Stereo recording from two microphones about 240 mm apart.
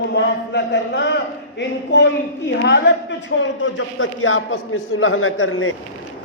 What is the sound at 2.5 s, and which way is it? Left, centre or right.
Speech, left.